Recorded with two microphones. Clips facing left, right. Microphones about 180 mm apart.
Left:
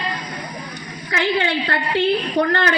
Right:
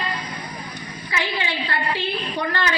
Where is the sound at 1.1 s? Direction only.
60° left (ahead or behind).